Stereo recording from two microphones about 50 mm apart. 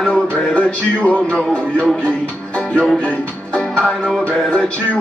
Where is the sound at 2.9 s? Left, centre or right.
Left.